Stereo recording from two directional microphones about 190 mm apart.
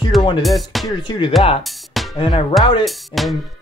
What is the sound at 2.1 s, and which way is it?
Speech, 25° left (ahead or behind).